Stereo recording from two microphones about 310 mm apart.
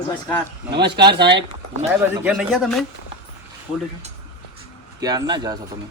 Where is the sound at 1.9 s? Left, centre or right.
Centre.